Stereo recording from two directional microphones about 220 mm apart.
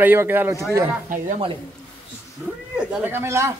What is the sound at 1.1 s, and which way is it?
Speech, 35° right (ahead or behind).